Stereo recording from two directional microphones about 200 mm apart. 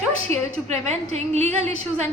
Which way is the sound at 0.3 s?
30° right (ahead or behind).